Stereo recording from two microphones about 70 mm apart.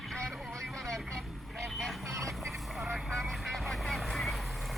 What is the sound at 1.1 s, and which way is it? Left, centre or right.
Vehicle, centre.